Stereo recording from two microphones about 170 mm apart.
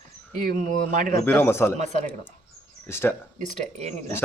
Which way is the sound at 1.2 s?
10° left (ahead or behind).